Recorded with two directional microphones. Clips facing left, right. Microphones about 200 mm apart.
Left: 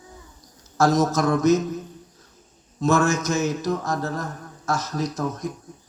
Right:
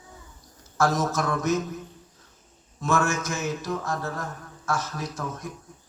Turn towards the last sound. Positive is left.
turn(degrees=40)  # may be behind; listen again after turning